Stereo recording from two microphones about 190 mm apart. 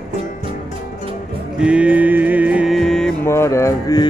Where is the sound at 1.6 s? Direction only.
5° right (ahead or behind).